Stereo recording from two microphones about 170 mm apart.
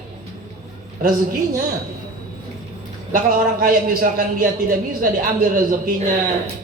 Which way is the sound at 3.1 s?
55° right (ahead or behind).